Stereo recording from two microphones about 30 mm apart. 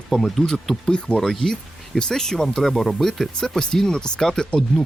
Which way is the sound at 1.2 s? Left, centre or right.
Centre.